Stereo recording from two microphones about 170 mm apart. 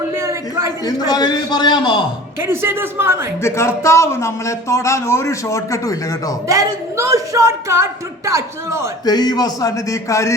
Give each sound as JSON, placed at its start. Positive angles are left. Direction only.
{"t": 0.2, "sound": "a sound", "side_deg": -15}
{"t": 0.9, "sound": "a man's voice", "side_deg": 20}
{"t": 2.4, "sound": "speech", "side_deg": -15}
{"t": 3.4, "sound": "speech", "side_deg": 15}
{"t": 6.5, "sound": "speech", "side_deg": -15}
{"t": 9.0, "sound": "a man's voice", "side_deg": 25}